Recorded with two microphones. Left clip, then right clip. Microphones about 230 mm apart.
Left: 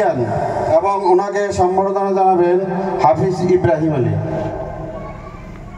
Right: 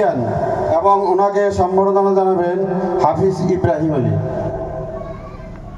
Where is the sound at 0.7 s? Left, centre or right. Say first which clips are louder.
Even; right.